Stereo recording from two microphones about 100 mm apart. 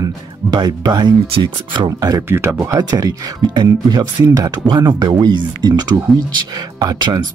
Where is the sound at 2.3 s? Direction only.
25° right (ahead or behind).